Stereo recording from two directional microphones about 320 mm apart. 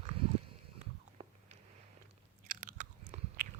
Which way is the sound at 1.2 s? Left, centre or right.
Centre.